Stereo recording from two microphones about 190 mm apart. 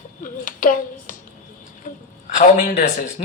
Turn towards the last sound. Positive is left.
turn(degrees=40)  # may be behind; listen again after turning